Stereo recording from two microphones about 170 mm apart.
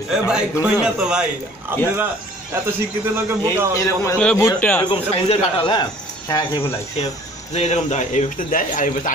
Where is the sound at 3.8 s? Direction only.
15° left (ahead or behind).